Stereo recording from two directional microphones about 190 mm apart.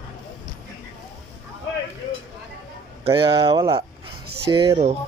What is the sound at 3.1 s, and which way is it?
Speech, 25° right (ahead or behind).